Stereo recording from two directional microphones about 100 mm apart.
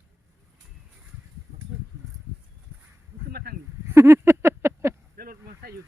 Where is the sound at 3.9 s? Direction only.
25° right (ahead or behind).